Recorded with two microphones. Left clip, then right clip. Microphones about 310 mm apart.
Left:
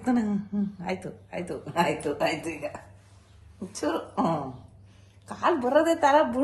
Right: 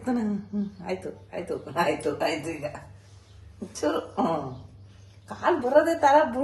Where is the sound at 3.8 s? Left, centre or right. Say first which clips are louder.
Right 1 dB; left.